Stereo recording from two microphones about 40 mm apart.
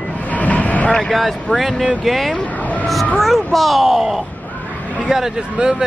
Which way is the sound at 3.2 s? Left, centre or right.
Centre.